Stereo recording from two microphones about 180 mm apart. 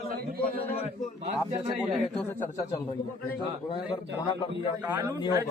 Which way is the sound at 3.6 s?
25° left (ahead or behind).